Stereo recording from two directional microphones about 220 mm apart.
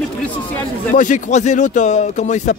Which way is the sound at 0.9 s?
35° left (ahead or behind).